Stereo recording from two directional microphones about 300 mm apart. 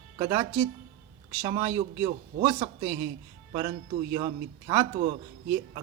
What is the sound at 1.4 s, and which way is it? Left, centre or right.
A man's voice, centre.